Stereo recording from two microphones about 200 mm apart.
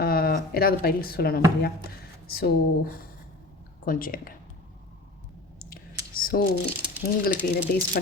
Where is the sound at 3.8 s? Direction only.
45° left (ahead or behind).